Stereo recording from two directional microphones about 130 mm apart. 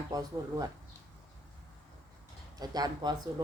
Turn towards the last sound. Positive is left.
turn(degrees=-35)  # may be behind; listen again after turning